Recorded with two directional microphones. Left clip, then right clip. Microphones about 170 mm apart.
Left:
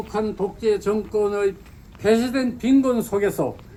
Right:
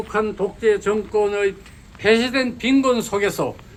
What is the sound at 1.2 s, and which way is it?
A man's voice, 55° left (ahead or behind).